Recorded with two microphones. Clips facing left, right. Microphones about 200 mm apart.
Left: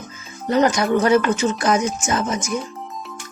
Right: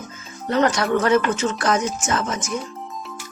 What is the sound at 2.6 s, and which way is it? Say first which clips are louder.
Music: left 1 dB; centre (ahead or behind).